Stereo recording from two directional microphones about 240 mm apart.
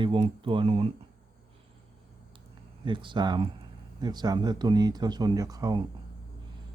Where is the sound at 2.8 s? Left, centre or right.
Centre.